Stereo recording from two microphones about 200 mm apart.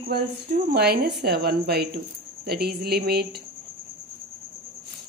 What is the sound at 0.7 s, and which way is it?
A woman's voice, 50° right (ahead or behind).